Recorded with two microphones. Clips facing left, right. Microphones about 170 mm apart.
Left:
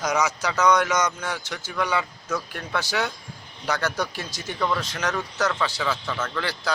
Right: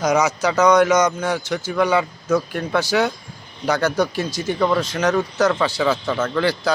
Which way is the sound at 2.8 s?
10° right (ahead or behind).